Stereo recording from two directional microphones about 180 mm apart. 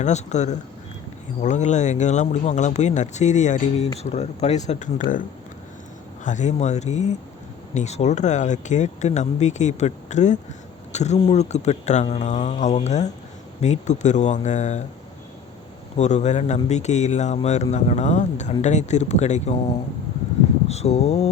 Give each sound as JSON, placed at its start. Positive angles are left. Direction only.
{"t": 0.0, "sound": "speech", "side_deg": 40}
{"t": 6.2, "sound": "speech", "side_deg": 40}
{"t": 16.0, "sound": "speech", "side_deg": 40}
{"t": 20.7, "sound": "a sound", "side_deg": 35}